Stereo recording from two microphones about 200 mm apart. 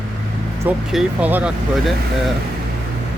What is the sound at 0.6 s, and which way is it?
Speech, 5° right (ahead or behind).